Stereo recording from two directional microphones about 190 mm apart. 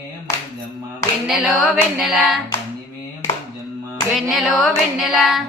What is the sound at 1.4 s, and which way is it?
Child singing, centre (ahead or behind).